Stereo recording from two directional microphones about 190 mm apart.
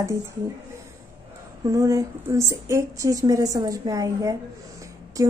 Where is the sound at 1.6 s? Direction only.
15° right (ahead or behind).